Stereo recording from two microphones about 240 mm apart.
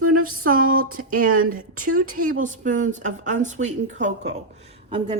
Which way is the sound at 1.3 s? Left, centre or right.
Right.